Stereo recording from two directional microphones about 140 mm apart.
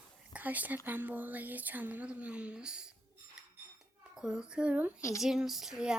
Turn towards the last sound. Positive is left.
turn(degrees=-5)  # may be behind; listen again after turning